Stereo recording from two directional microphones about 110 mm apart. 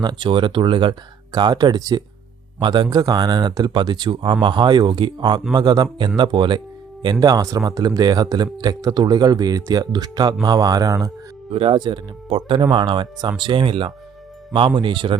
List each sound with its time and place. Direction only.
0.0 s speech: 45° right (ahead or behind)
2.8 s speech: 35° right (ahead or behind)
11.5 s speech: 50° right (ahead or behind)